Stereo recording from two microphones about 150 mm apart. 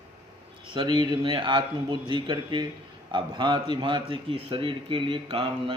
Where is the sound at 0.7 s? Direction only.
30° right (ahead or behind).